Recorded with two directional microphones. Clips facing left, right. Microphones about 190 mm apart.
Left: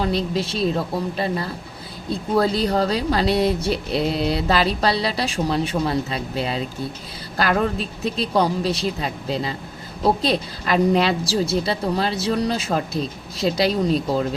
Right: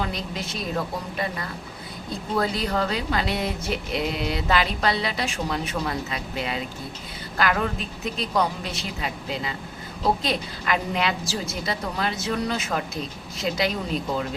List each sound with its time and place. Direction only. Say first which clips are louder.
0.0 s speech: left 8 dB; 35° left (ahead or behind)